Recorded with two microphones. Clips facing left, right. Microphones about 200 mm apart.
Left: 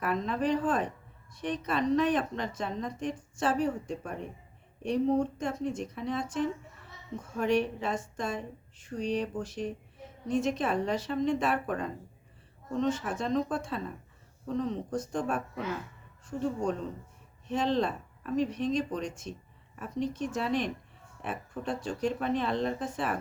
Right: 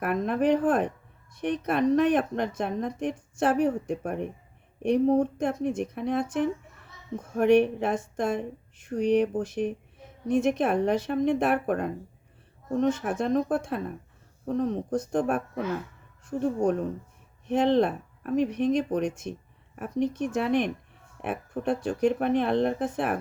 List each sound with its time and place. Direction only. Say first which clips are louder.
0.0 s a woman's voice: right 5 dB; 55° right (ahead or behind)